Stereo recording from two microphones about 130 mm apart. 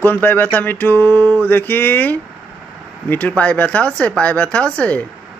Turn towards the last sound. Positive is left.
turn(degrees=10)  # may be behind; listen again after turning